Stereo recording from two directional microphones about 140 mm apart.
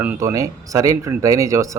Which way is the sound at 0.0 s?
20° right (ahead or behind).